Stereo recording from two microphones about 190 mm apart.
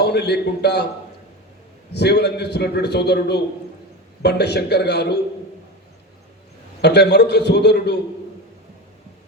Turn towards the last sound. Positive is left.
turn(degrees=60)  # may be behind; listen again after turning